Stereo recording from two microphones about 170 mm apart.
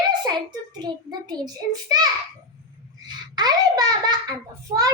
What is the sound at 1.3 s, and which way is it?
Speech, 20° right (ahead or behind).